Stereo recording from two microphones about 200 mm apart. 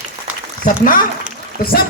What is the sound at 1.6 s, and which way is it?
Speech, 45° left (ahead or behind).